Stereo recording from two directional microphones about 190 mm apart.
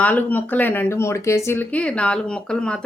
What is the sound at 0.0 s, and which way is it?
Speech, 10° left (ahead or behind).